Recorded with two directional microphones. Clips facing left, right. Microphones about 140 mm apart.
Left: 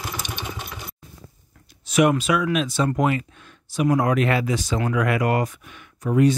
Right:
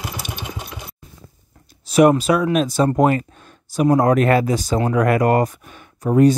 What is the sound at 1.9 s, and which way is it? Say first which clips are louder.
Speech: right 5 dB; 35° right (ahead or behind).